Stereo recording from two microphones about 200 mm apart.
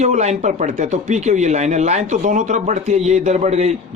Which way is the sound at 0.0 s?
35° right (ahead or behind).